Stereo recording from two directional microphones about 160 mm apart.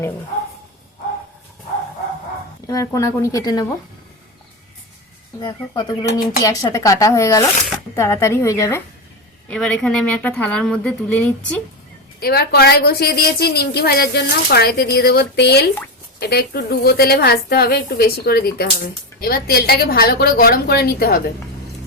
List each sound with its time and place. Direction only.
2.6 s a woman's voice: 20° left (ahead or behind)
5.7 s a woman's voice: 25° left (ahead or behind)
9.5 s a woman's voice: 5° left (ahead or behind)
12.2 s a woman's voice: 75° left (ahead or behind)